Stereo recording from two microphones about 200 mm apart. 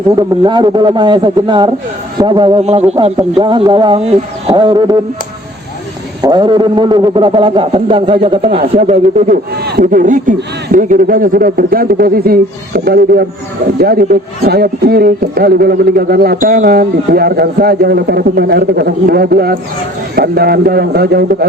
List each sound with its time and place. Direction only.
0.2 s speech: 20° right (ahead or behind)
6.2 s a man's voice: 25° right (ahead or behind); by 21.2 s 50° right (ahead or behind)